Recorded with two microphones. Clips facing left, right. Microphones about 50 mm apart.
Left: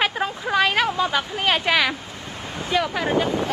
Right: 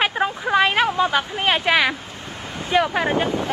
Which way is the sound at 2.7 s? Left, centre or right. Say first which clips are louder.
Right 3 dB; right.